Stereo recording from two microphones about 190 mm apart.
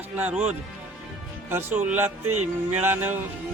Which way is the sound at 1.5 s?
10° right (ahead or behind).